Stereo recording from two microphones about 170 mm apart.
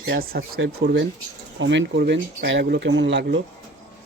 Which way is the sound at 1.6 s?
90° right.